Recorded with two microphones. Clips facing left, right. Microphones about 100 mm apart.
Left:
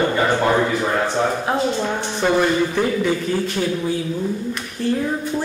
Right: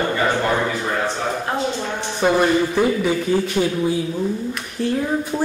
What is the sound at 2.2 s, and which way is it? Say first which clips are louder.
Speech: right 1 dB; 10° right (ahead or behind).